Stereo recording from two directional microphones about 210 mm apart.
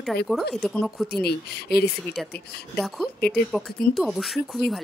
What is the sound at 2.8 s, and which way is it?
Speech, 5° left (ahead or behind).